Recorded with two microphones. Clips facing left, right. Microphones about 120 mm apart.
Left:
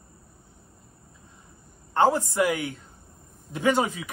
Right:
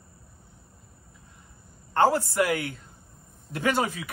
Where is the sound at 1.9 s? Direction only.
20° left (ahead or behind).